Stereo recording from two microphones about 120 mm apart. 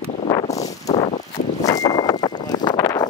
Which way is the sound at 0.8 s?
60° left (ahead or behind).